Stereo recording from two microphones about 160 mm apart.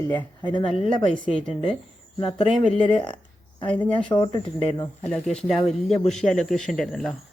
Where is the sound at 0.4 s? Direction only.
30° left (ahead or behind).